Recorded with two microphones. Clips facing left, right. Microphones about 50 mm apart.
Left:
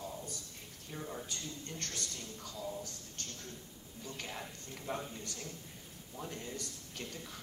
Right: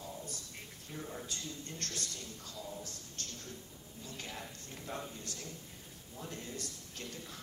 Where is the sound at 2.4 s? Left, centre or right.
Left.